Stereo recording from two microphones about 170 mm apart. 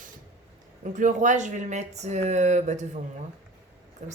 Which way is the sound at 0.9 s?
50° right (ahead or behind).